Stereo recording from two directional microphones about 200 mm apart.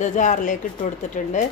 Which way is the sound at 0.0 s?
40° left (ahead or behind).